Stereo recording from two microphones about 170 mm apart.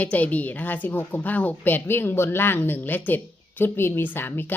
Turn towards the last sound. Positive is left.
turn(degrees=10)  # may be behind; listen again after turning